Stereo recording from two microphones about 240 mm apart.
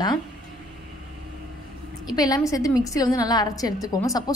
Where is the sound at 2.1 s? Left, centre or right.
Centre.